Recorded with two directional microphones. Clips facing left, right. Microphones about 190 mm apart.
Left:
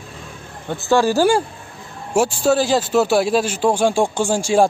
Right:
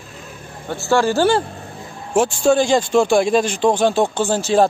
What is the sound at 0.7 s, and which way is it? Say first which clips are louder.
A man's voice: left 1 dB; 15° left (ahead or behind).